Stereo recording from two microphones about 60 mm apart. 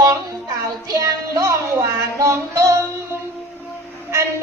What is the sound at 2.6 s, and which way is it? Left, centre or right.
Music, right.